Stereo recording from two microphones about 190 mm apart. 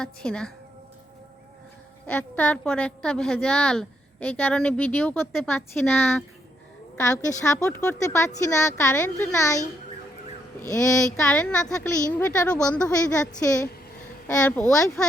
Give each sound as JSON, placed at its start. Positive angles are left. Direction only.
{"t": 0.0, "sound": "a woman's voice", "side_deg": 5}
{"t": 2.0, "sound": "a woman's voice", "side_deg": 10}
{"t": 10.7, "sound": "a woman's voice", "side_deg": 15}
{"t": 11.3, "sound": "a woman's voice", "side_deg": 5}
{"t": 13.1, "sound": "a woman's voice", "side_deg": 15}
{"t": 14.3, "sound": "a woman's voice", "side_deg": 5}